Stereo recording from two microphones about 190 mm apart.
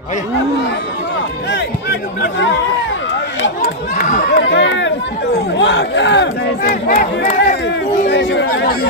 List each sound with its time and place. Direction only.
4.0 s chatter: 55° left (ahead or behind)
8.1 s speech: 60° left (ahead or behind)